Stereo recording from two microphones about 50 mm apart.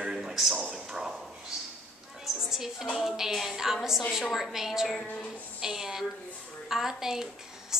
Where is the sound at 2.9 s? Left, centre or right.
Centre.